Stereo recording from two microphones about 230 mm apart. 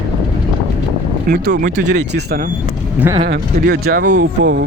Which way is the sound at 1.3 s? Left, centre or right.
Right.